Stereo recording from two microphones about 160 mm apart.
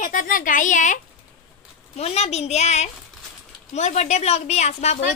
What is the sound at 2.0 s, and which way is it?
A woman's voice, 40° left (ahead or behind).